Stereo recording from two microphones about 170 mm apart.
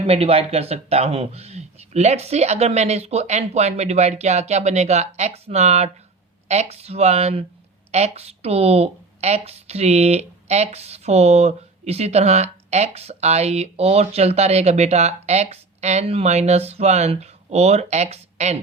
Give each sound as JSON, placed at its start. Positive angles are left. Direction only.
{"t": 0.0, "sound": "speech", "side_deg": -35}